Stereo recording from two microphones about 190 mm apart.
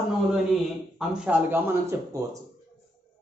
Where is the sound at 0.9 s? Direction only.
5° right (ahead or behind).